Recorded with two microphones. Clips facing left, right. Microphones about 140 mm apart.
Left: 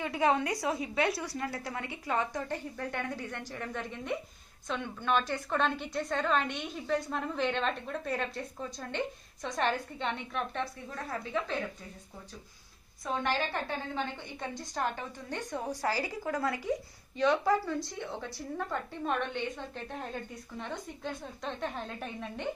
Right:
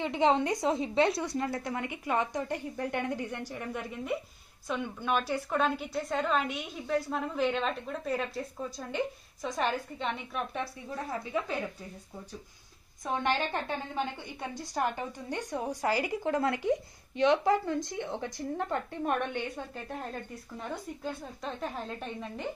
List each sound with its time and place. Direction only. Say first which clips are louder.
0.0 s a woman's voice: right 2 dB; 25° right (ahead or behind)
13.0 s a woman's voice: right 2 dB; 20° right (ahead or behind); by 22.5 s centre (ahead or behind)